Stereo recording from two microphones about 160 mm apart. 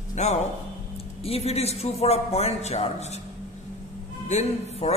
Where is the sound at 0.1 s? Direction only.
45° left (ahead or behind).